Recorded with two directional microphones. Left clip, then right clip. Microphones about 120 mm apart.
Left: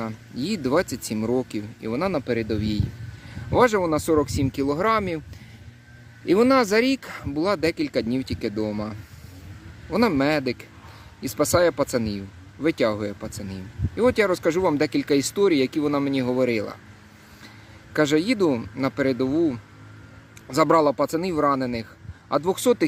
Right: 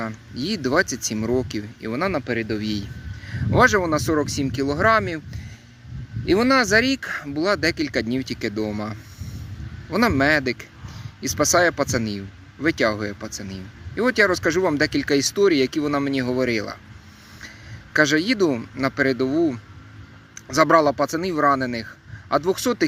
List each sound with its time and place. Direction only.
0.0 s speech: 10° left (ahead or behind)
6.2 s speech: 15° left (ahead or behind)
17.9 s speech: 10° left (ahead or behind)
20.5 s speech: 10° left (ahead or behind)